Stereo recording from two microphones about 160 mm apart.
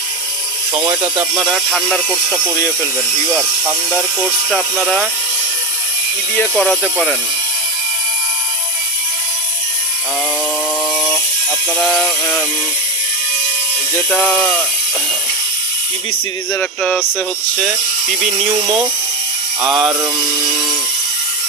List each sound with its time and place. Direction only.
0.8 s speech: 25° right (ahead or behind)
1.2 s speech: 5° right (ahead or behind)
11.8 s speech: 5° left (ahead or behind)
14.1 s music: 10° left (ahead or behind)
16.5 s music: 10° left (ahead or behind)
19.6 s speech: 5° right (ahead or behind)